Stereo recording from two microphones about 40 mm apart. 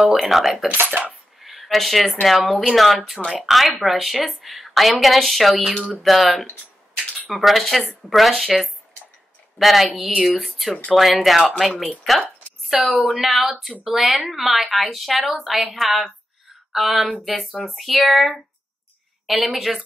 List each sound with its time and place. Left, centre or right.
0.0 s speech: centre
0.7 s speech: right
1.4 s a sound: centre
2.2 s speech: centre
12.7 s speech: centre